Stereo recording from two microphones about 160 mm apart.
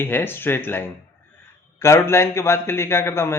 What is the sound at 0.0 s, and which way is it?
A man's voice, 15° left (ahead or behind).